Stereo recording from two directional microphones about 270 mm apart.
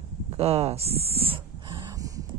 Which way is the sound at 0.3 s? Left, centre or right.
Right.